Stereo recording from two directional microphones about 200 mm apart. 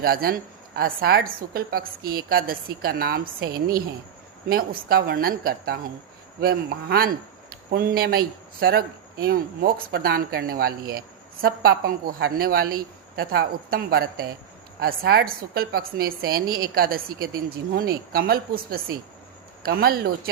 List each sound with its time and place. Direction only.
0.0 s speech: 50° right (ahead or behind)